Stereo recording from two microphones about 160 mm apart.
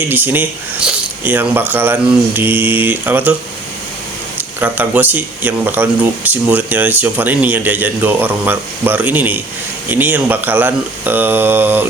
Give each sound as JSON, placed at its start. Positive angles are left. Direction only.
{"t": 0.1, "sound": "speech", "side_deg": -10}
{"t": 4.4, "sound": "speech", "side_deg": -10}